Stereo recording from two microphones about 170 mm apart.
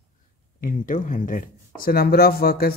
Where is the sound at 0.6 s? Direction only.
50° left (ahead or behind).